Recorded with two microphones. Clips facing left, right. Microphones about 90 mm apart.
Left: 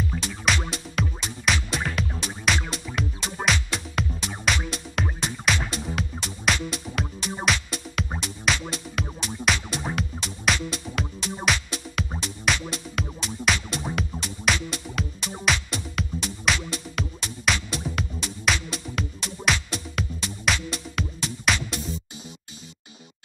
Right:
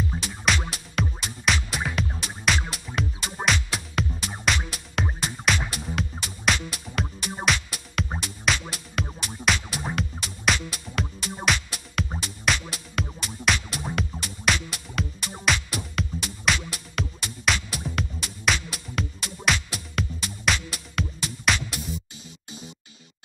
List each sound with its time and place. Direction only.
0.1 s music: 30° right (ahead or behind)
1.2 s music: centre (ahead or behind)